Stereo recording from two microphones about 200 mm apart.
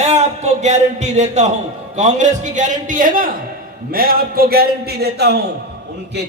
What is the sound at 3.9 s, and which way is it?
A man's voice, 45° right (ahead or behind).